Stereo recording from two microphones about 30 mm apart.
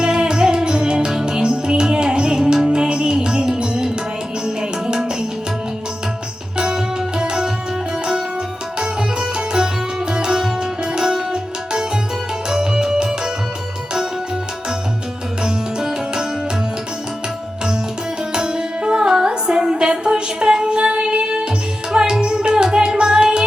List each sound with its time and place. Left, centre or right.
0.0 s music: right
7.2 s music: right
8.8 s music: right
15.4 s music: right
18.3 s music: right
20.7 s music: right
22.4 s music: right